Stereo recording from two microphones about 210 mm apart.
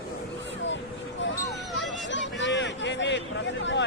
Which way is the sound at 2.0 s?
60° left (ahead or behind).